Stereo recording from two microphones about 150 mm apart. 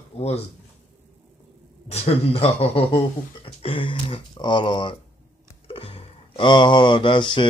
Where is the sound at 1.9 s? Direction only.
45° left (ahead or behind).